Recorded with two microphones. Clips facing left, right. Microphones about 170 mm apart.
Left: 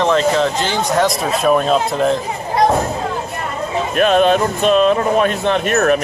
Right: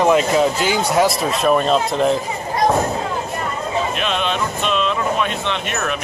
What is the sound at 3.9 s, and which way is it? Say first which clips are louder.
Speech: left 9 dB; 45° left (ahead or behind).